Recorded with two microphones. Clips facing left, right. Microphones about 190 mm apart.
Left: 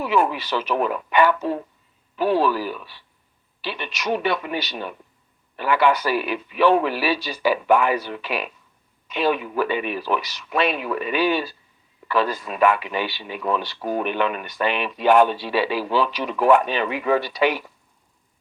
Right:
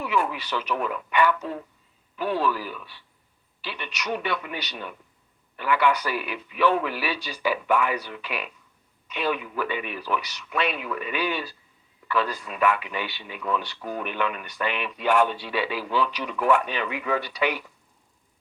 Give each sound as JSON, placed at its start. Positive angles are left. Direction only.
{"t": 0.0, "sound": "speech", "side_deg": 30}
{"t": 12.6, "sound": "speech", "side_deg": 30}